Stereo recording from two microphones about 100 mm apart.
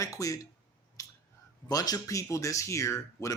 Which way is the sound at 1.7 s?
40° left (ahead or behind).